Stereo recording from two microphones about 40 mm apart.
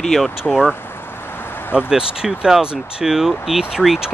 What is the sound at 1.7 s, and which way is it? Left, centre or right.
Speech, centre.